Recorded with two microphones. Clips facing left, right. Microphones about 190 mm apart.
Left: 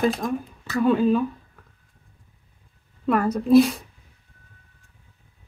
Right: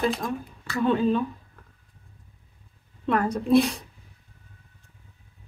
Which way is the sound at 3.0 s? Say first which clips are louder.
Left 3 dB; 5° left (ahead or behind).